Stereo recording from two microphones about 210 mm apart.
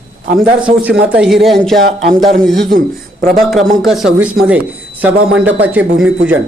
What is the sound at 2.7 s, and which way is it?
Speech, 40° right (ahead or behind).